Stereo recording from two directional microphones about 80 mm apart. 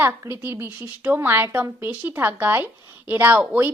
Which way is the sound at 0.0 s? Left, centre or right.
Right.